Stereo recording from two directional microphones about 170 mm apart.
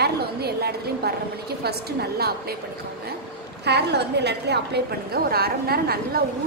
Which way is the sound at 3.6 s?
75° right (ahead or behind).